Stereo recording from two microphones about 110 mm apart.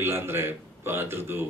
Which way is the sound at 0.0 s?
20° right (ahead or behind).